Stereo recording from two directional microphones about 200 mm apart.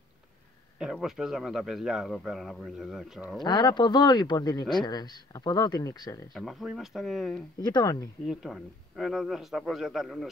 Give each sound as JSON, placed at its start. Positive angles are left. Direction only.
{"t": 0.7, "sound": "speech", "side_deg": 0}
{"t": 3.4, "sound": "speech", "side_deg": 20}
{"t": 6.3, "sound": "speech", "side_deg": 0}
{"t": 7.6, "sound": "speech", "side_deg": 20}
{"t": 8.3, "sound": "speech", "side_deg": 0}